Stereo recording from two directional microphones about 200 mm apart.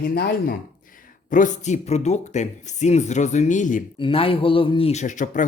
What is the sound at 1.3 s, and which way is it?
A man's voice, 40° left (ahead or behind).